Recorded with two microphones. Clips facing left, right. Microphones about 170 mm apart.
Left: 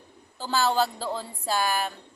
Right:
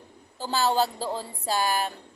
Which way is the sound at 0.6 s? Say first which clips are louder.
Right 1 dB; 40° right (ahead or behind).